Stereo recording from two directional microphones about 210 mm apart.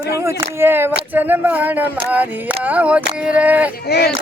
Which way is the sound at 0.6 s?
10° right (ahead or behind).